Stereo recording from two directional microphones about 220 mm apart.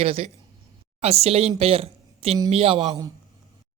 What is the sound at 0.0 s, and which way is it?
Speech, 25° right (ahead or behind).